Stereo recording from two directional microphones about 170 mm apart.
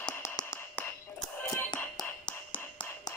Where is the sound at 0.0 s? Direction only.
15° left (ahead or behind).